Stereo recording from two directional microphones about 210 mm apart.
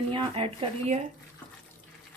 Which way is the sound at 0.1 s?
25° right (ahead or behind).